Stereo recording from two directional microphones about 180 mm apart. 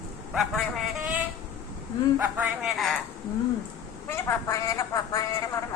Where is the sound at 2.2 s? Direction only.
10° right (ahead or behind).